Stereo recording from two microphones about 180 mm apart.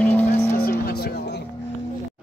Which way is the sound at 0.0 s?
10° left (ahead or behind).